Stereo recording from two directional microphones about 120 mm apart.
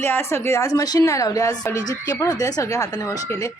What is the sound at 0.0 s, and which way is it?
Speech, 20° left (ahead or behind).